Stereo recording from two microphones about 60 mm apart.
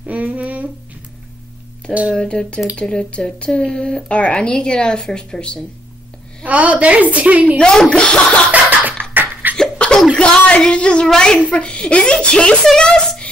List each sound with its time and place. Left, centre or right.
0.0 s a sound: right
2.1 s speech: centre
6.4 s a woman's voice: right
7.5 s speech: centre
8.5 s scratching: right
9.1 s laughter: right
9.6 s laughter: centre
10.1 s speech: centre